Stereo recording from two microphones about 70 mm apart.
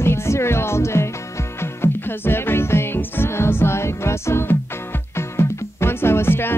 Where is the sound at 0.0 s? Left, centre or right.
Left.